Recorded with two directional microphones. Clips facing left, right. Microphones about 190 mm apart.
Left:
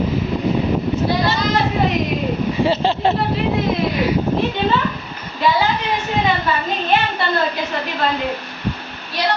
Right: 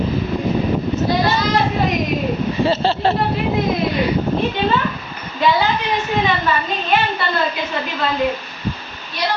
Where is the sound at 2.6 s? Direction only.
15° left (ahead or behind).